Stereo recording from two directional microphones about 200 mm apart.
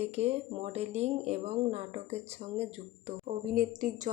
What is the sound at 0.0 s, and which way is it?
Speech, 30° right (ahead or behind).